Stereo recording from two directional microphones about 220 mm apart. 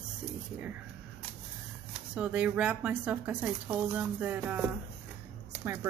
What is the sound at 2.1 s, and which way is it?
Speech, 5° right (ahead or behind).